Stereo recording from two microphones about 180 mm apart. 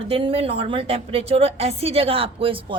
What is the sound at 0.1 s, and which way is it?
A woman's voice, 30° right (ahead or behind).